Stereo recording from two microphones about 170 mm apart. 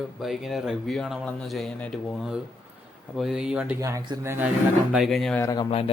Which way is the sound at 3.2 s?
5° right (ahead or behind).